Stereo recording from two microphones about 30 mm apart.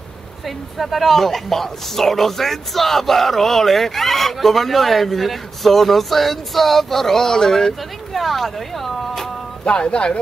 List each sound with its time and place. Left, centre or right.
0.7 s speech: centre
8.1 s speech: centre
9.7 s speech: left